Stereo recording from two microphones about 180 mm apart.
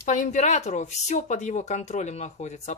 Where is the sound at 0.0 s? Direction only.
45° left (ahead or behind).